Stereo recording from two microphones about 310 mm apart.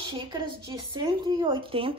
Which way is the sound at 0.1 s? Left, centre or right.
Centre.